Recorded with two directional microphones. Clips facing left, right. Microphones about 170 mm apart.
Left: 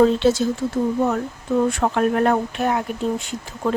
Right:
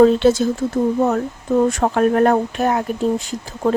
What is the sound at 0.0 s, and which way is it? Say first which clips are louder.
Speech: right 4 dB; 50° right (ahead or behind).